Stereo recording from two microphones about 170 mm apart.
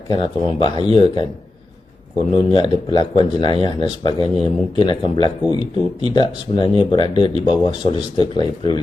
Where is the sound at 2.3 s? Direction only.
30° left (ahead or behind).